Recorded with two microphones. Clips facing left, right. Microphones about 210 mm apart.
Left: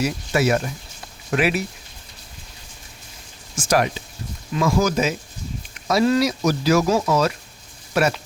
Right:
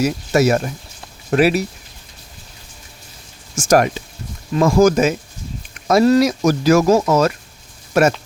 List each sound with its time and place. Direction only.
0.0 s speech: 40° right (ahead or behind)
3.5 s speech: 45° right (ahead or behind)